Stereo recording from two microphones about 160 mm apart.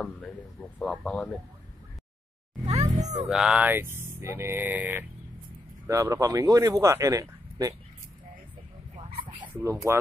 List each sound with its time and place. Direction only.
0.6 s a man's voice: 5° left (ahead or behind)
2.6 s music: 40° right (ahead or behind)
3.3 s speech: 5° right (ahead or behind); by 7.7 s 20° right (ahead or behind)
9.6 s speech: 15° right (ahead or behind)